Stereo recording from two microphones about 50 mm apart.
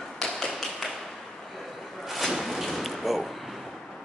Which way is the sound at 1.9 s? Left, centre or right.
Centre.